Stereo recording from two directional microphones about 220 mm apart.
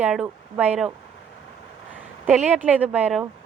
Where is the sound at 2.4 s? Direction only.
5° right (ahead or behind).